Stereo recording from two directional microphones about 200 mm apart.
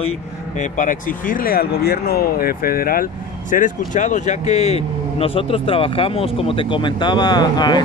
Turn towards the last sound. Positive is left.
turn(degrees=20)  # may be behind; listen again after turning